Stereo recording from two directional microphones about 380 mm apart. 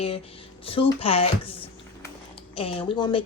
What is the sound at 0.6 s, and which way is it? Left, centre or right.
Speech, centre.